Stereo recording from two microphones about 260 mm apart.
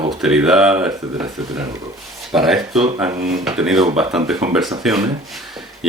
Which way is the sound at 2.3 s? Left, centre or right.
Centre.